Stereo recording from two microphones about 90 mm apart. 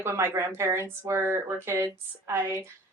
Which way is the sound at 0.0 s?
30° right (ahead or behind).